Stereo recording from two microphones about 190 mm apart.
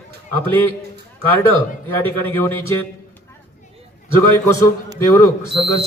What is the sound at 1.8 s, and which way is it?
Speech, 10° left (ahead or behind).